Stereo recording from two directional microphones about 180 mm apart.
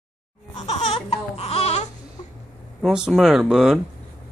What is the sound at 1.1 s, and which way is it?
Baby cry, 35° left (ahead or behind).